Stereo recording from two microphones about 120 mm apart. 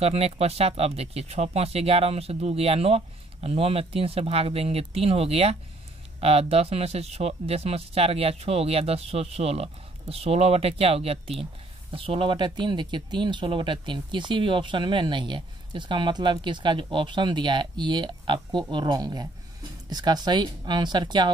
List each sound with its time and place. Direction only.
0.0 s speech: 60° right (ahead or behind); by 21.3 s 35° right (ahead or behind)